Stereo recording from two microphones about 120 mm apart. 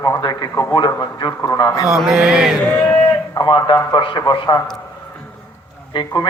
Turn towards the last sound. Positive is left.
turn(degrees=40)  # may be behind; listen again after turning